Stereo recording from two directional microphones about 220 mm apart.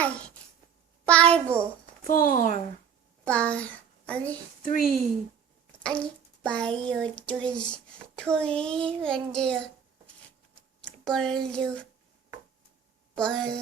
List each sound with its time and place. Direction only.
0.0 s a sound: 5° left (ahead or behind)
1.0 s a child's voice: 5° left (ahead or behind)
2.0 s speech: 40° left (ahead or behind)
3.2 s a child's voice: 5° left (ahead or behind)
4.6 s speech: 40° left (ahead or behind)
5.8 s a child's voice: 5° left (ahead or behind)
10.8 s speech: 5° left (ahead or behind)
13.1 s a child's voice: 5° left (ahead or behind)